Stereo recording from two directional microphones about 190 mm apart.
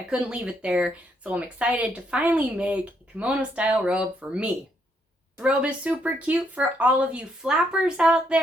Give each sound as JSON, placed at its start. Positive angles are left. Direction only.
{"t": 0.1, "sound": "speech", "side_deg": -5}